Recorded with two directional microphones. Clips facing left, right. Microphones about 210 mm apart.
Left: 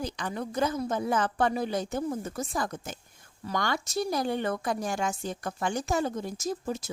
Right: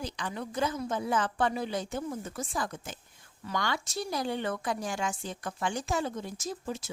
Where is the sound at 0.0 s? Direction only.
45° left (ahead or behind).